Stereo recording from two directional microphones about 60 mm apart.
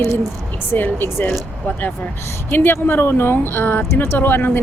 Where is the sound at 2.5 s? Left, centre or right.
Left.